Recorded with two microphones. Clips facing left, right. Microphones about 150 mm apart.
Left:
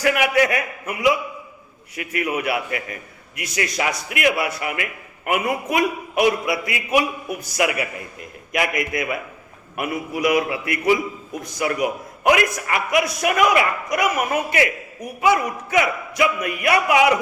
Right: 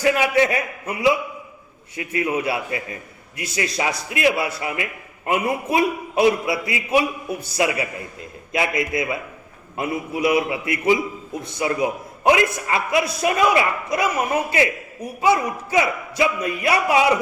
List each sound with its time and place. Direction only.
0.0 s a man's voice: 25° right (ahead or behind)